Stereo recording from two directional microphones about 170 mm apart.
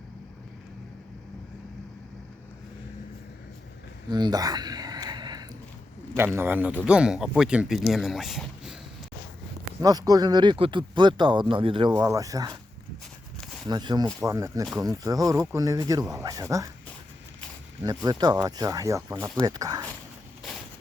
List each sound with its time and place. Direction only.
4.1 s a sound: 25° right (ahead or behind)
6.1 s a man's voice: 15° right (ahead or behind)
9.8 s speech: 20° right (ahead or behind)
13.7 s a man's voice: 25° right (ahead or behind)
17.8 s speech: 20° right (ahead or behind)